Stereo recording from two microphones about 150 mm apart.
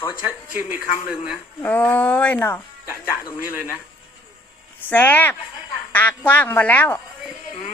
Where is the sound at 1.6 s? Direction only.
10° left (ahead or behind).